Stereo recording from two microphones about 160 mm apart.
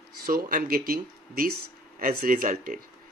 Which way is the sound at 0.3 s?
65° right (ahead or behind).